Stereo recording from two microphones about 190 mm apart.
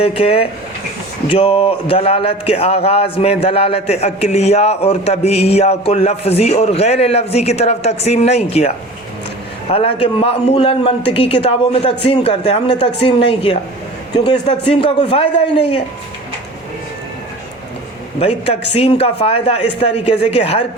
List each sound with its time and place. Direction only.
0.0 s a man's voice: 30° left (ahead or behind)
18.2 s speech: 30° left (ahead or behind)